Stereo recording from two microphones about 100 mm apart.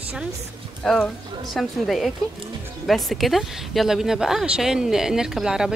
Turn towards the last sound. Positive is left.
turn(degrees=-5)  # may be behind; listen again after turning